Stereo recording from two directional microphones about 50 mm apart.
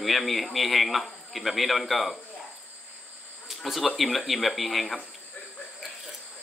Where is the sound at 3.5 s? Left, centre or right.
Centre.